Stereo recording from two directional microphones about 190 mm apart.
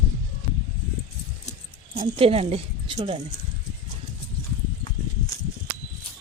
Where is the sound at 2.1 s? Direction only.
30° right (ahead or behind).